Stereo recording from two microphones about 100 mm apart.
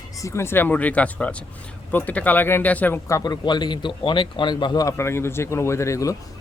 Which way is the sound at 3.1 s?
35° left (ahead or behind).